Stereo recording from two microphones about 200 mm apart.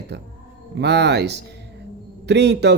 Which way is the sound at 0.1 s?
55° right (ahead or behind).